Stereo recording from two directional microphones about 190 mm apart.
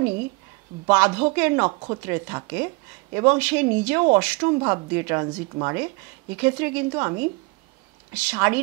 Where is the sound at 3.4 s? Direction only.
10° right (ahead or behind).